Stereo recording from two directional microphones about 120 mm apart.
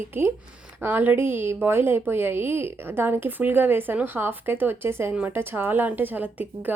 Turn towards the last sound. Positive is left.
turn(degrees=-15)  # may be behind; listen again after turning